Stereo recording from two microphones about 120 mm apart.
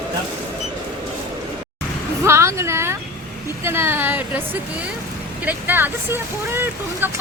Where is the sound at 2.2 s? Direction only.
25° right (ahead or behind).